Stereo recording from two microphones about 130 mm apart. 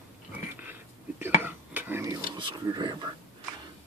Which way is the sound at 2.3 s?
35° right (ahead or behind).